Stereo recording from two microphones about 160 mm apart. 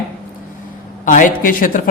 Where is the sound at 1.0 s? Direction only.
55° left (ahead or behind).